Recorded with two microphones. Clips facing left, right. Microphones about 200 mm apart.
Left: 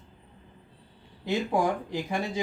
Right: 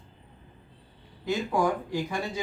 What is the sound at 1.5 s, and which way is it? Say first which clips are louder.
Speech: right 2 dB; 25° left (ahead or behind).